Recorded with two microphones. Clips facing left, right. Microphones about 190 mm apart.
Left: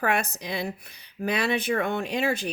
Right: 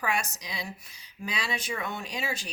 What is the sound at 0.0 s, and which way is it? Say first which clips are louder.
Speech: left 5 dB; 60° left (ahead or behind).